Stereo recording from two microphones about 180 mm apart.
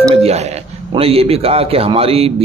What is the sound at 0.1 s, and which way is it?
A man's voice, 35° right (ahead or behind).